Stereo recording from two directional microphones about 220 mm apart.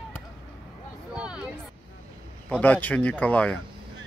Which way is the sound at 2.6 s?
5° left (ahead or behind).